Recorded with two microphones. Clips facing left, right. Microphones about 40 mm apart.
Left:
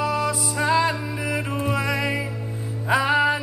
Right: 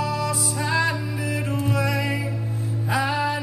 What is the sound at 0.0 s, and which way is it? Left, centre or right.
Music, left.